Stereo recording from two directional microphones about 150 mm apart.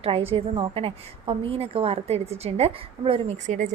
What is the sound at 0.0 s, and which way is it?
A woman's voice, 40° right (ahead or behind).